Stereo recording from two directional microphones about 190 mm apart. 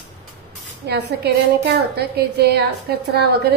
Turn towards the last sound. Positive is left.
turn(degrees=-55)  # may be behind; listen again after turning